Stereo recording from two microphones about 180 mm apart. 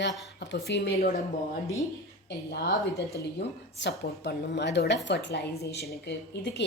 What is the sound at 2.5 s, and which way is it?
A woman's voice, 65° left (ahead or behind).